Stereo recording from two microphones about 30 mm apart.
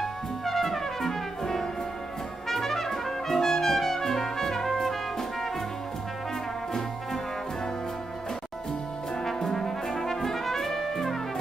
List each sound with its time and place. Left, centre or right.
0.0 s music: centre
2.5 s trumpet: centre
9.2 s brass instrument: centre
10.8 s music: centre